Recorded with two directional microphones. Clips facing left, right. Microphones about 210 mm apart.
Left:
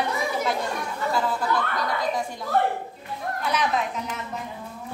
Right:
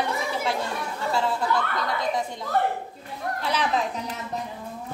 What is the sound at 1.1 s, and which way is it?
Speech, 25° right (ahead or behind).